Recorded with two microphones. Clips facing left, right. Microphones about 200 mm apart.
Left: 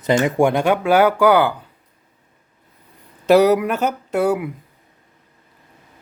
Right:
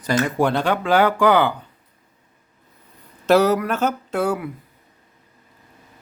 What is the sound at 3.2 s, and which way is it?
Speech, 15° left (ahead or behind).